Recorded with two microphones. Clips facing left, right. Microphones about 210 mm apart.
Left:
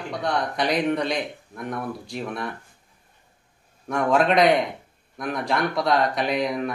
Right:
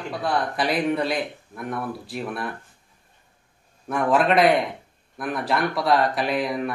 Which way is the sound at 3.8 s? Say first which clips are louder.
Even; 5° right (ahead or behind).